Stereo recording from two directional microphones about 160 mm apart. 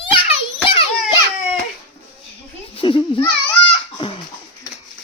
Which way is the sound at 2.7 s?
30° left (ahead or behind).